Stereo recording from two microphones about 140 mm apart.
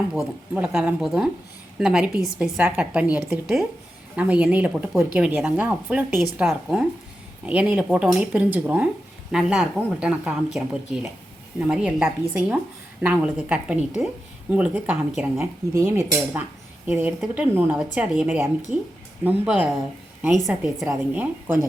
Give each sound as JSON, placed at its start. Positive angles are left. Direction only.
{"t": 0.1, "sound": "a woman's voice", "side_deg": -10}
{"t": 15.7, "sound": "cutlery", "side_deg": -20}
{"t": 16.8, "sound": "a woman's voice", "side_deg": -15}
{"t": 20.8, "sound": "a woman's voice", "side_deg": -15}